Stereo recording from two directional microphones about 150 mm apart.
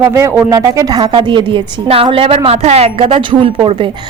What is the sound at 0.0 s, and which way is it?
A woman's voice, 20° right (ahead or behind).